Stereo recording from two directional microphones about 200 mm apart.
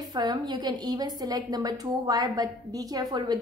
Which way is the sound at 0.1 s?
20° right (ahead or behind).